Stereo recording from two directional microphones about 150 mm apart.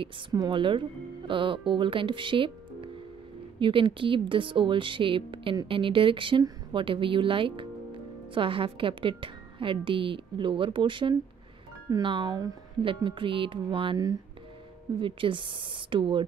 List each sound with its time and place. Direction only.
0.0 s speech: 30° right (ahead or behind)